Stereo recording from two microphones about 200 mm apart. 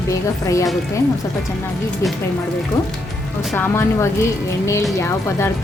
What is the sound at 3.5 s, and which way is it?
Speech, 10° left (ahead or behind).